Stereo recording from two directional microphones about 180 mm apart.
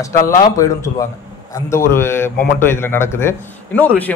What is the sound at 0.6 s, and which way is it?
A man's voice, 15° left (ahead or behind).